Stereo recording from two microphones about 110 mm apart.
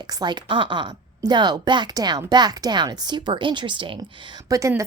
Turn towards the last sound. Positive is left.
turn(degrees=-30)  # may be behind; listen again after turning